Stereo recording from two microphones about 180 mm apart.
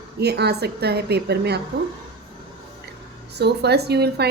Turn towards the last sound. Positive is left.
turn(degrees=-65)  # may be behind; listen again after turning